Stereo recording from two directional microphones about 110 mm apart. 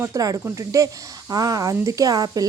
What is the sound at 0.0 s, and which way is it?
A woman's voice, 30° right (ahead or behind).